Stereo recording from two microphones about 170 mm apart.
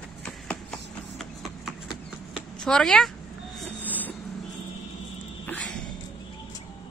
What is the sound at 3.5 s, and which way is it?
Train, 10° left (ahead or behind).